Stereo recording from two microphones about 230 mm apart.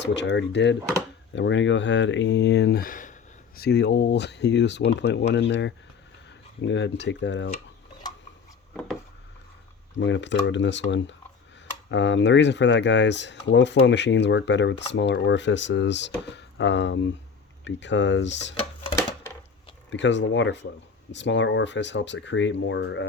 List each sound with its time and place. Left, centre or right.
0.0 s speech: left
10.0 s speech: left
19.9 s speech: left